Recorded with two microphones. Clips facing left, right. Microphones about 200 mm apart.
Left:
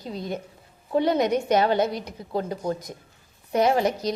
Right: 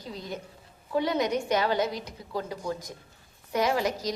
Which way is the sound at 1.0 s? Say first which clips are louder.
Left 5 dB; 55° left (ahead or behind).